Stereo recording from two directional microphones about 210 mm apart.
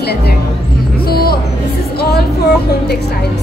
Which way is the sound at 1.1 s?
50° left (ahead or behind).